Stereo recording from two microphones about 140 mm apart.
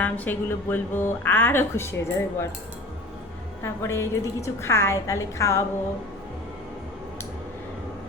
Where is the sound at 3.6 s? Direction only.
20° left (ahead or behind).